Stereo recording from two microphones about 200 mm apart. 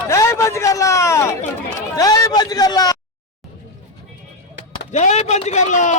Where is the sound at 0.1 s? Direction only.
15° left (ahead or behind).